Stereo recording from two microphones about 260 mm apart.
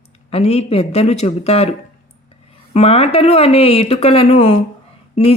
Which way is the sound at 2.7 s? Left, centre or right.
Left.